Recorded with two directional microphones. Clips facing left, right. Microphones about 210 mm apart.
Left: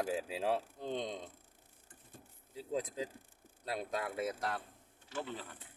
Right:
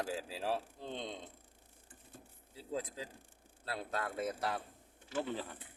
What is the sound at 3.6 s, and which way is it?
Speech, 15° left (ahead or behind).